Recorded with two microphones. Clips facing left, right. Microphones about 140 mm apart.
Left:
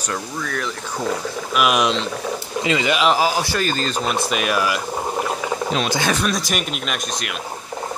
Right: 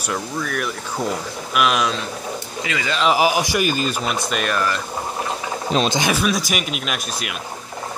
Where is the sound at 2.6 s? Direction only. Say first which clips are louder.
Left 6 dB; 25° left (ahead or behind).